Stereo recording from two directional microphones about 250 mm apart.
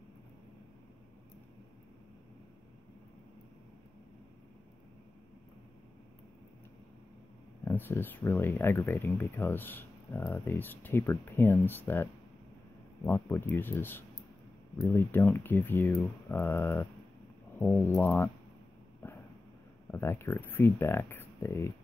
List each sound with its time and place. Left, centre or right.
7.6 s speech: centre
19.0 s a sound: centre
19.9 s speech: centre